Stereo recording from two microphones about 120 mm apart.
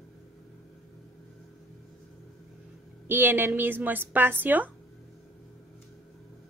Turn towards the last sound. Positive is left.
turn(degrees=-15)  # may be behind; listen again after turning